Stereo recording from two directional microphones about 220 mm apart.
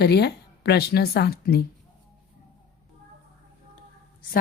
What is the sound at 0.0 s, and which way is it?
A woman's voice, 50° left (ahead or behind).